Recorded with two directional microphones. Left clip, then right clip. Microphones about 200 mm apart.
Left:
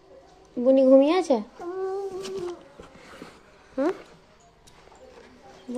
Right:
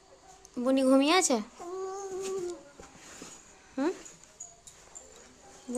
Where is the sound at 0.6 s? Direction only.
20° right (ahead or behind).